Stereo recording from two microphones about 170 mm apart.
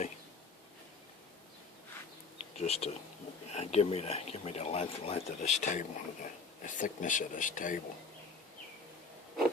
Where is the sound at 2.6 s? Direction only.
35° left (ahead or behind).